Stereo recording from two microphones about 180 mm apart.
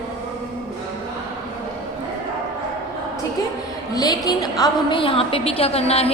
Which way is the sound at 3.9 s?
20° left (ahead or behind).